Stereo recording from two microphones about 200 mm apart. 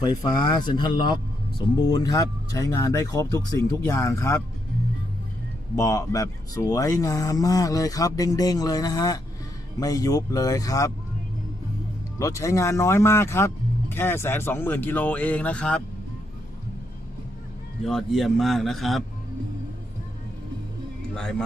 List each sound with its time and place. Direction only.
0.0 s speech: 20° left (ahead or behind)
5.7 s speech: 15° left (ahead or behind)
12.2 s speech: 15° left (ahead or behind)
17.8 s a man's voice: centre (ahead or behind)
21.2 s a man's voice: 5° left (ahead or behind)